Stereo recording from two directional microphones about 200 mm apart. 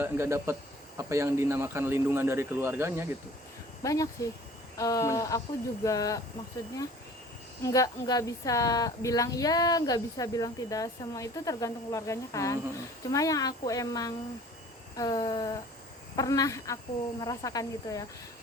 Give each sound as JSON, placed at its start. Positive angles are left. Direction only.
{"t": 0.0, "sound": "speech", "side_deg": -15}
{"t": 3.8, "sound": "a woman's voice", "side_deg": 15}
{"t": 7.6, "sound": "a woman's voice", "side_deg": 15}
{"t": 14.9, "sound": "a sound", "side_deg": 20}
{"t": 16.1, "sound": "a woman's voice", "side_deg": 15}